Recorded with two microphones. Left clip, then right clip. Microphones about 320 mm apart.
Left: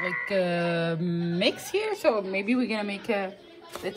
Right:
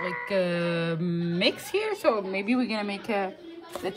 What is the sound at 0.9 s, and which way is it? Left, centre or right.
Speech, centre.